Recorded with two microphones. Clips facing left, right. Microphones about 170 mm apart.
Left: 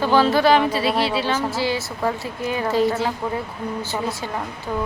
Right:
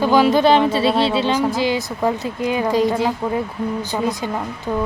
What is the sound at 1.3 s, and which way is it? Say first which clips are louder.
A woman's voice: right 4 dB; 15° right (ahead or behind).